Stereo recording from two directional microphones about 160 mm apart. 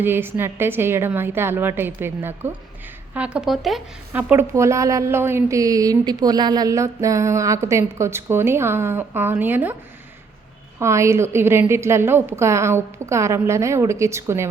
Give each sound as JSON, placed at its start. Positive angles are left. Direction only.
{"t": 0.0, "sound": "a woman's voice", "side_deg": -15}
{"t": 10.8, "sound": "a woman's voice", "side_deg": -15}